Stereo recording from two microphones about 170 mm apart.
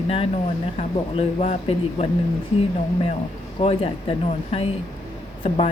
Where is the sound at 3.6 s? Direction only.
35° left (ahead or behind).